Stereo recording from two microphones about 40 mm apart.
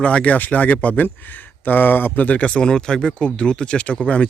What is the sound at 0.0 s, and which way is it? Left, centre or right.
Speech, left.